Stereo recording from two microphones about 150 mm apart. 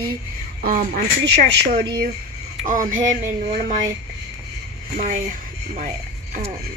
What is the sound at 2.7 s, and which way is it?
Speech, 60° right (ahead or behind).